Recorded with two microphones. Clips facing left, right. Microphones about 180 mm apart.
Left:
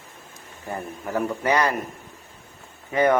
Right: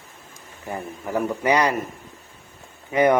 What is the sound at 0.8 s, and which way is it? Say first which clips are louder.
Speech: right 1 dB; 15° right (ahead or behind).